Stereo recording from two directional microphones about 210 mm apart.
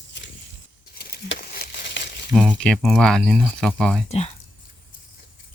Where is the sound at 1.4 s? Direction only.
45° left (ahead or behind).